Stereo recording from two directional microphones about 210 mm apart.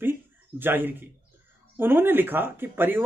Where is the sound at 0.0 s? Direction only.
10° right (ahead or behind).